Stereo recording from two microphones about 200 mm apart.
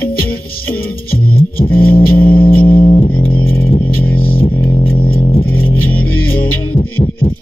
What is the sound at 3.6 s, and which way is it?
Music, 45° left (ahead or behind).